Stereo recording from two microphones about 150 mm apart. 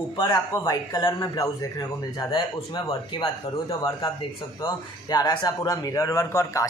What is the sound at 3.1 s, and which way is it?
A man's voice, 35° left (ahead or behind).